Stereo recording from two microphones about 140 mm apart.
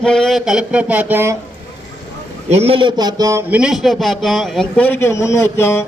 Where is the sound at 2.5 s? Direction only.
45° right (ahead or behind); by 3.4 s 25° right (ahead or behind).